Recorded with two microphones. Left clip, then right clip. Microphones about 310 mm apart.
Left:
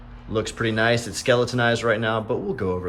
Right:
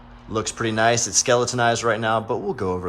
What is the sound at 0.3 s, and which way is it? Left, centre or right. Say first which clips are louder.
Speech: even; centre.